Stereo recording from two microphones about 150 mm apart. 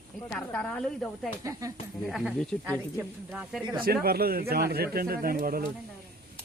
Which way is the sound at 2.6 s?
15° right (ahead or behind).